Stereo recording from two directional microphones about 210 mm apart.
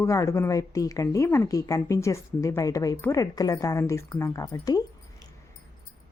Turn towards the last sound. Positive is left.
turn(degrees=15)  # may be behind; listen again after turning